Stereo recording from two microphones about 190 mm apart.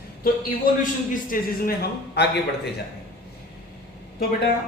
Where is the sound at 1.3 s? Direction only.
45° left (ahead or behind).